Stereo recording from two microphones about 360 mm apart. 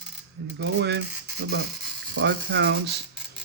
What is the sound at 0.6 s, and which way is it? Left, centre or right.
Speech, right.